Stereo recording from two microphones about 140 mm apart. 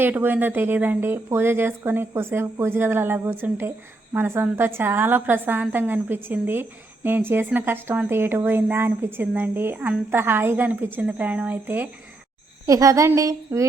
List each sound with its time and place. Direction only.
0.0 s a woman's voice: 15° right (ahead or behind)
12.6 s a woman's voice: 25° right (ahead or behind)